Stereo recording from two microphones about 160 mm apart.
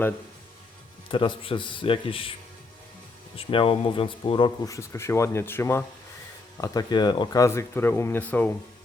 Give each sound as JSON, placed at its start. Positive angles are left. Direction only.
{"t": 1.0, "sound": "speech", "side_deg": 30}
{"t": 3.3, "sound": "speech", "side_deg": 35}
{"t": 4.6, "sound": "speech", "side_deg": 20}
{"t": 6.6, "sound": "speech", "side_deg": 25}